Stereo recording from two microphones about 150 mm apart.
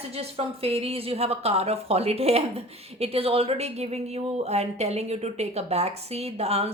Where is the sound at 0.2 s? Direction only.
40° right (ahead or behind).